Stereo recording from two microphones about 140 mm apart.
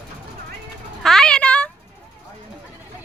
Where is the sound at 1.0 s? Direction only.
5° left (ahead or behind).